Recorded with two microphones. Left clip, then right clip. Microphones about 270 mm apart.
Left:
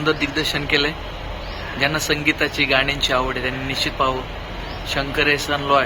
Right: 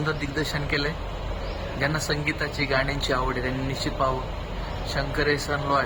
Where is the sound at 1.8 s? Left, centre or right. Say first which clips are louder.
Left 7 dB; centre.